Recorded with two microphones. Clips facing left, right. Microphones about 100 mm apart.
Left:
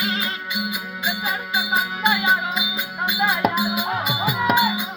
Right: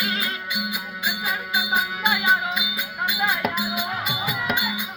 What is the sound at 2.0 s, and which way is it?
Music, centre (ahead or behind).